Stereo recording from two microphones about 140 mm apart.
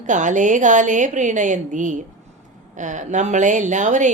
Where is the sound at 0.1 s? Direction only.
60° right (ahead or behind).